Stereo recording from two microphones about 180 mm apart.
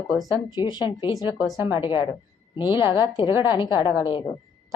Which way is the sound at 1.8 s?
25° left (ahead or behind).